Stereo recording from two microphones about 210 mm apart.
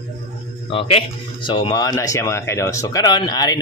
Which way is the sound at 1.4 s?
20° left (ahead or behind).